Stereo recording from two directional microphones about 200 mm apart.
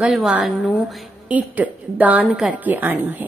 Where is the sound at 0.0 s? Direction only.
5° right (ahead or behind).